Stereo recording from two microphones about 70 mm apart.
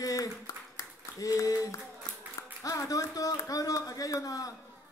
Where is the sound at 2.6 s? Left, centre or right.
Left.